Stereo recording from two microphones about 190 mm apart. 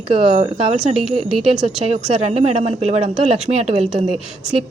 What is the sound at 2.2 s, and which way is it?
Speech, 35° right (ahead or behind).